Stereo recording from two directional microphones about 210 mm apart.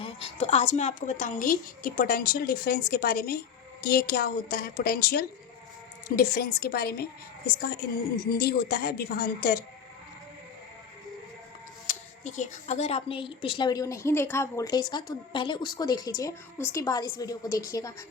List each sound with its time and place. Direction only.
0.0 s a woman's voice: 30° left (ahead or behind); by 9.6 s 45° left (ahead or behind)
11.9 s a woman's voice: 35° left (ahead or behind); by 17.9 s 15° left (ahead or behind)